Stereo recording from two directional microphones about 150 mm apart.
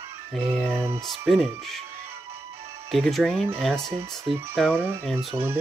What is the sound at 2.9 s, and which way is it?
Speech, 5° left (ahead or behind).